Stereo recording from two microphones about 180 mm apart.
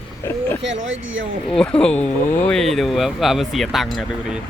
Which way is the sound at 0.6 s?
90° right.